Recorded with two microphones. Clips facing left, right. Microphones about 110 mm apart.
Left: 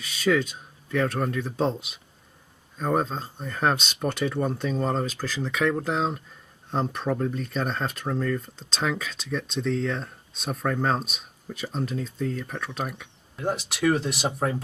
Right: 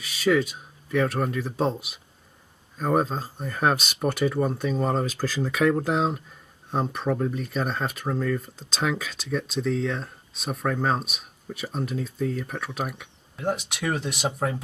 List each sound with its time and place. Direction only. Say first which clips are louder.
0.0 s speech: right 1 dB; 5° right (ahead or behind)